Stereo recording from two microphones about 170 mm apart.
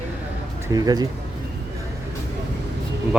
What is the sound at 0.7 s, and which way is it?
Speech, 20° right (ahead or behind).